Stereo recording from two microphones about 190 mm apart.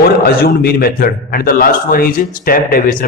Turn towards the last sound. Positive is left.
turn(degrees=50)  # may be behind; listen again after turning